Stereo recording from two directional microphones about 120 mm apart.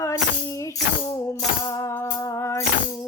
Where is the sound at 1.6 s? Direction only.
30° left (ahead or behind).